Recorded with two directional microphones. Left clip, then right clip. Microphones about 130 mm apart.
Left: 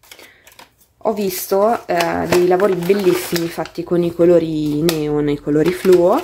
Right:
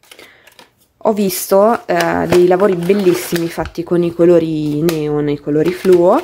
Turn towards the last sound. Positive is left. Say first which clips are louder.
# right 1 dB
turn(degrees=-10)  # may be behind; listen again after turning